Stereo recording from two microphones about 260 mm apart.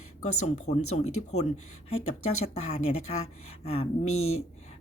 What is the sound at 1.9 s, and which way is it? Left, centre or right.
Speech, left.